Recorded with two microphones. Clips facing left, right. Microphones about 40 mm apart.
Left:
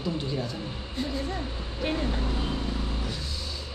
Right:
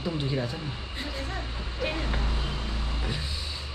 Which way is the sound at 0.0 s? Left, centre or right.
Right.